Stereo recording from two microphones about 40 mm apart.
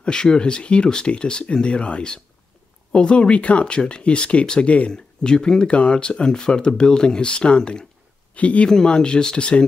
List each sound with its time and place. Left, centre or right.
0.0 s speech: left
4.9 s speech: left
8.6 s speech: centre